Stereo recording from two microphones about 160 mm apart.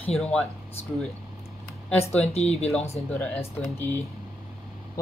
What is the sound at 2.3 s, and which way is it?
Speech, 40° left (ahead or behind).